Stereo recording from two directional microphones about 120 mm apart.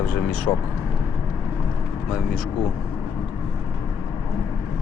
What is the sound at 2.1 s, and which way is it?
Speech, 5° right (ahead or behind).